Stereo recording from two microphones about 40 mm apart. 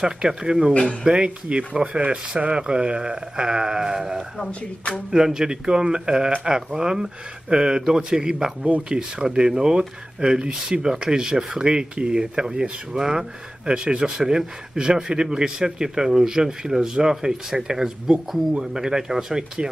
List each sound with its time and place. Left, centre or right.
0.0 s speech: centre
4.5 s speech: left
5.1 s a man's voice: centre
14.1 s a man's voice: centre